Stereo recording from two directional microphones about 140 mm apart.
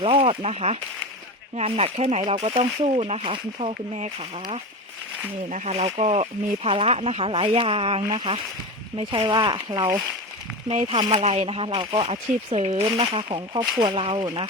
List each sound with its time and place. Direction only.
0.0 s speech: 40° right (ahead or behind)
5.5 s speech: 55° right (ahead or behind); by 9.9 s 30° right (ahead or behind)
10.7 s speech: 45° right (ahead or behind)
12.1 s speech: 45° right (ahead or behind)